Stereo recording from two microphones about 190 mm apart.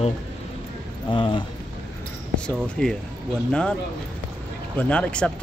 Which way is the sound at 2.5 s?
5° left (ahead or behind).